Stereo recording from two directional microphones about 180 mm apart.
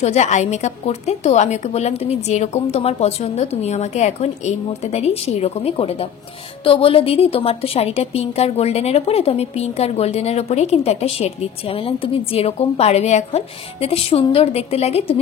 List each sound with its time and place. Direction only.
0.0 s a woman's voice: 40° left (ahead or behind)